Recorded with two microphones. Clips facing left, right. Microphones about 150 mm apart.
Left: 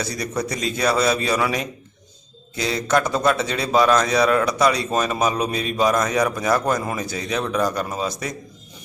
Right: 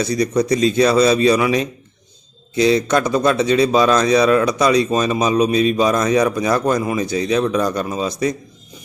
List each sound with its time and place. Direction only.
0.0 s a man's voice: 20° right (ahead or behind)